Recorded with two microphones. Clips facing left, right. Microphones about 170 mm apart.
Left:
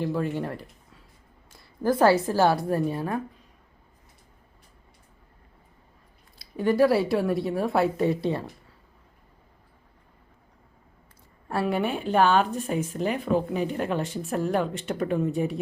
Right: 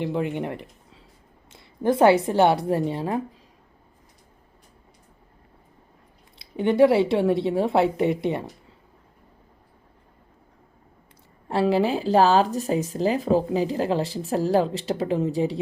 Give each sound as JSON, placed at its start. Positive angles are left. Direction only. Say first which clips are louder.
{"t": 0.0, "sound": "a woman's voice", "louder": "right 1 dB", "side_deg": -20}
{"t": 6.6, "sound": "a woman's voice", "louder": "right 3 dB", "side_deg": -25}
{"t": 11.4, "sound": "speech", "louder": "right 5 dB", "side_deg": -25}